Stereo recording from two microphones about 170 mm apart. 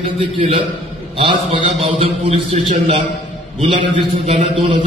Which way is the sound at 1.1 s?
30° right (ahead or behind).